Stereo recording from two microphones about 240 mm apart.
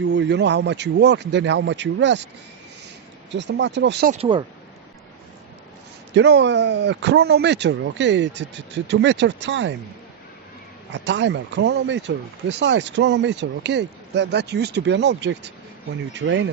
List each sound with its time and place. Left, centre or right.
0.0 s speech: right
3.3 s speech: right
4.1 s speech: right
6.1 s speech: right
10.9 s speech: right